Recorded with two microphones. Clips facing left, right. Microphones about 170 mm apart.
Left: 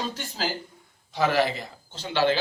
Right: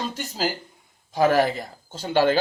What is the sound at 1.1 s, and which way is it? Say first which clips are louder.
Speech: right 4 dB; 45° right (ahead or behind).